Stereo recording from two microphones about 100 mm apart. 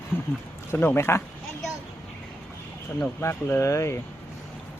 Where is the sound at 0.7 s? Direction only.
20° left (ahead or behind).